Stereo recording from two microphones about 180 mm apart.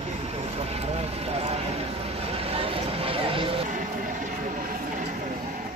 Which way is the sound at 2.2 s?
35° right (ahead or behind).